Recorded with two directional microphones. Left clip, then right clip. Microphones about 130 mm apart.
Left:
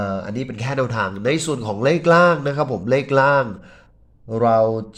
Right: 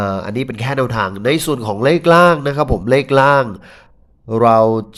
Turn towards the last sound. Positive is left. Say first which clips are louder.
# right 5 dB
turn(degrees=-50)  # may be behind; listen again after turning